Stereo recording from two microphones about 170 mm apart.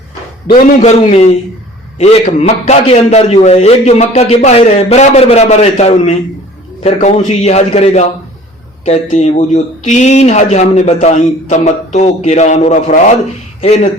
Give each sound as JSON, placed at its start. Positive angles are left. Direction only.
{"t": 0.5, "sound": "a man's voice", "side_deg": 40}